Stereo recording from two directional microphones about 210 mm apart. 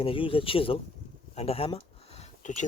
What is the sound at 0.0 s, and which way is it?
Speech, 25° left (ahead or behind).